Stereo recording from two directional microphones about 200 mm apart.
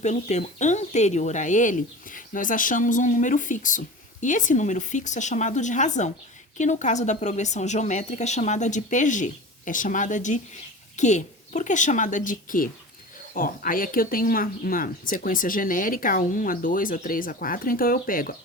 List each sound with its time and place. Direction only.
0.0 s speech: 35° left (ahead or behind)